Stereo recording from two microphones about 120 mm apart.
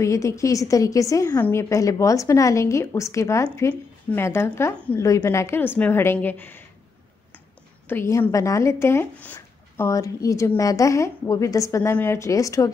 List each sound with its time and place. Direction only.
0.0 s a woman's voice: 25° left (ahead or behind)
7.9 s speech: 20° left (ahead or behind)